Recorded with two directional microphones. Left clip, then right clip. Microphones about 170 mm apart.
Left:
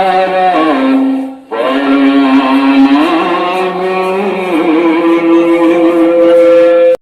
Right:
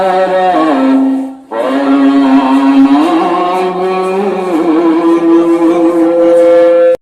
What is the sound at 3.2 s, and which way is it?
Music, 35° right (ahead or behind).